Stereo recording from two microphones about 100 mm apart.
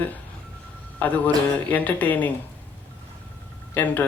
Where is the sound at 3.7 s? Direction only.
15° left (ahead or behind).